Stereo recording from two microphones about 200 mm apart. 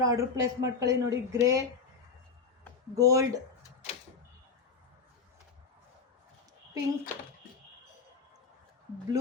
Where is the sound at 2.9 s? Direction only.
15° right (ahead or behind).